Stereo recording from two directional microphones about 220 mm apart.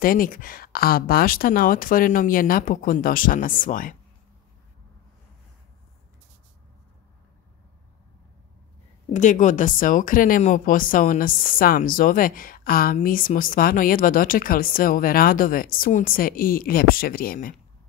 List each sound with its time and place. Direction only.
0.0 s speech: 40° left (ahead or behind)
9.1 s speech: 35° left (ahead or behind)